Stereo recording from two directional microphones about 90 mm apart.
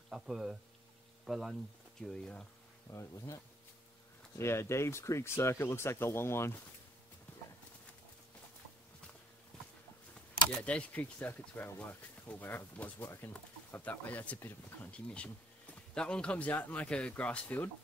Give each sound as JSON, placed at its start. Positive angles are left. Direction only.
{"t": 0.1, "sound": "speech", "side_deg": -5}
{"t": 2.9, "sound": "speech", "side_deg": 35}
{"t": 10.6, "sound": "speech", "side_deg": 15}